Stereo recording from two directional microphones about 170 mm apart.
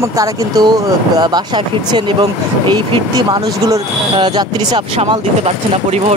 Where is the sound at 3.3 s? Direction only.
25° right (ahead or behind).